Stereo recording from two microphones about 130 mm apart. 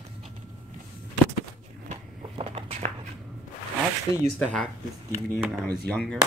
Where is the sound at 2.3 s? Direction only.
45° right (ahead or behind).